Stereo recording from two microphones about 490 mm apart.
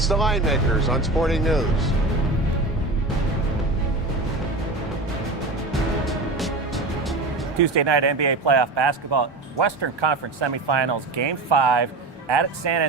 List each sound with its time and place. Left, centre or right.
0.0 s speech: centre
6.1 s music: centre
7.6 s speech: right